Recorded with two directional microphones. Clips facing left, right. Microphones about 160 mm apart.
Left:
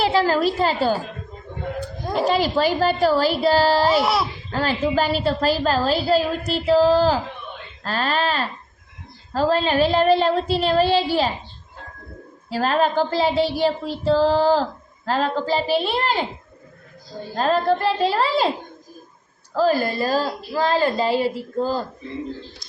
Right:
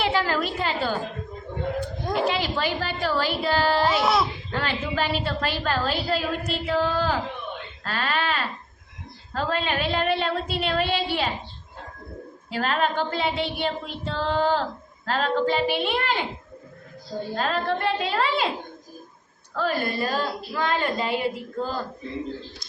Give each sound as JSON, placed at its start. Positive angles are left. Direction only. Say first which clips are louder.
{"t": 0.0, "sound": "a woman's voice", "louder": "left 6 dB", "side_deg": 35}
{"t": 3.9, "sound": "speech", "louder": "left 2 dB", "side_deg": 5}
{"t": 4.5, "sound": "a woman's voice", "louder": "left 7 dB", "side_deg": 40}
{"t": 12.5, "sound": "a woman's voice", "louder": "left 5 dB", "side_deg": 35}
{"t": 17.3, "sound": "a woman's voice", "louder": "left 7 dB", "side_deg": 40}
{"t": 19.5, "sound": "a woman's voice", "louder": "left 6 dB", "side_deg": 35}